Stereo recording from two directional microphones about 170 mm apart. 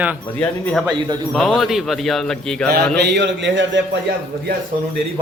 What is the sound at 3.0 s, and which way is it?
Speech, 80° right.